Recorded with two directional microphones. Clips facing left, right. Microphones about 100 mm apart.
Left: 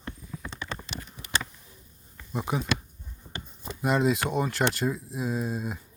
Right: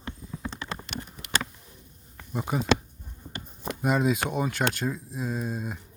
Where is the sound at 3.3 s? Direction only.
65° right (ahead or behind).